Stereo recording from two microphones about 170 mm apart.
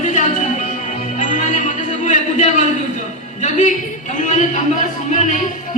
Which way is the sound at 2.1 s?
45° left (ahead or behind).